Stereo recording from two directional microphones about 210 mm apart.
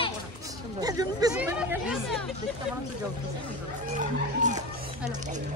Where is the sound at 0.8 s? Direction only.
15° right (ahead or behind).